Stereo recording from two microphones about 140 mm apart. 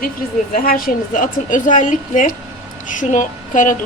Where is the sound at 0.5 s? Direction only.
90° left; by 3.8 s 65° left (ahead or behind).